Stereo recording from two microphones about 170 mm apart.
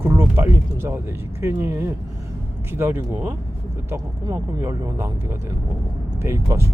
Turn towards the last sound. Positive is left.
turn(degrees=-15)  # may be behind; listen again after turning